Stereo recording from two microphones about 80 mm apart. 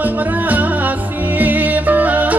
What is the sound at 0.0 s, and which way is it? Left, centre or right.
Music, right.